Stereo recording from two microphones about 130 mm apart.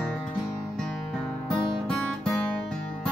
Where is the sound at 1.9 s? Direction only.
Centre (ahead or behind).